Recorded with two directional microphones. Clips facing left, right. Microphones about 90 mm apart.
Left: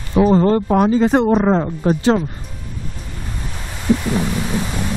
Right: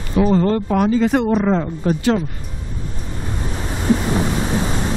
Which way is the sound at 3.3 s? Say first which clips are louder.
Right 6 dB; 25° right (ahead or behind).